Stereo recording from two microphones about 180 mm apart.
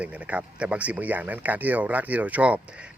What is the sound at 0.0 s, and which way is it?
Speech, 5° right (ahead or behind).